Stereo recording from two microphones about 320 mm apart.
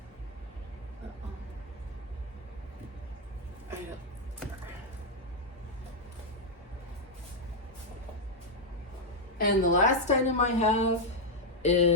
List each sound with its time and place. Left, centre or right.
9.4 s a woman's voice: left